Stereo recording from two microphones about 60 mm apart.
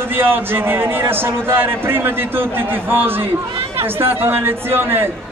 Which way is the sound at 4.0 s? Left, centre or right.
Right.